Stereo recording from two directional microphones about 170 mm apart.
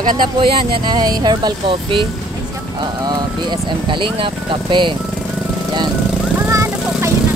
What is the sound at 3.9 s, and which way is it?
Speech, 30° right (ahead or behind).